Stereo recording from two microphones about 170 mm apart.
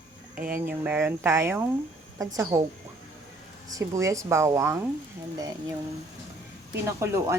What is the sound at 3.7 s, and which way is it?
Speech, 20° right (ahead or behind).